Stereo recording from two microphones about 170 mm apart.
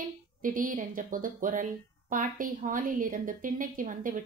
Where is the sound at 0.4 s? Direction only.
55° right (ahead or behind).